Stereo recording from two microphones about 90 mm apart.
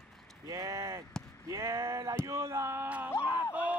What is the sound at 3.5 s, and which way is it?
Speech, 20° right (ahead or behind).